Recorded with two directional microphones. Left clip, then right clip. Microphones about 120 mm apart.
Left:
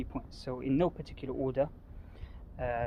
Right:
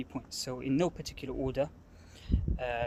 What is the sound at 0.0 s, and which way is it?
Speech, 35° right (ahead or behind).